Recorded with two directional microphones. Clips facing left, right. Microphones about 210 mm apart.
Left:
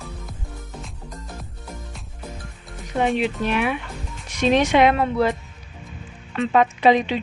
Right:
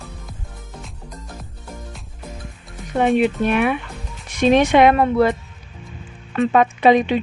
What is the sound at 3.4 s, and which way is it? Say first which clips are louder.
Speech: right 4 dB; 55° right (ahead or behind).